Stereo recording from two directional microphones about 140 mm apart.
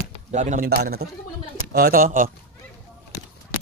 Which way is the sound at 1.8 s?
90° right.